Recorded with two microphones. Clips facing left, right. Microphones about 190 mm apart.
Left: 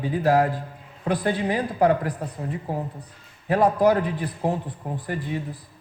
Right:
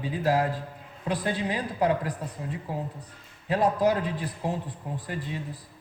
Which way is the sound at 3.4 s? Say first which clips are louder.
Left 5 dB; 60° left (ahead or behind).